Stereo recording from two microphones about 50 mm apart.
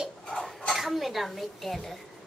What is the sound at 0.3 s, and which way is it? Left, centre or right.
Dishes, centre.